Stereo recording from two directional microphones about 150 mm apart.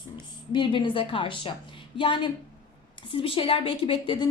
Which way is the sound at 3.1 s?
35° left (ahead or behind).